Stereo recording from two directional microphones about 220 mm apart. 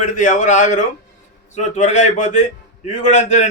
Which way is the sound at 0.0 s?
35° left (ahead or behind).